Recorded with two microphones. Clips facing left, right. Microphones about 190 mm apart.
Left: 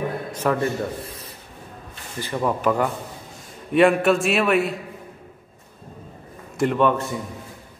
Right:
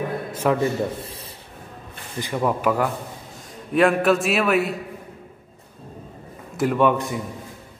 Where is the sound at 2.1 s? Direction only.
10° right (ahead or behind).